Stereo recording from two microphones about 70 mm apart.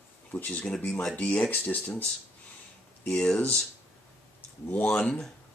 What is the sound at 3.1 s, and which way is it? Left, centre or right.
Speech, centre.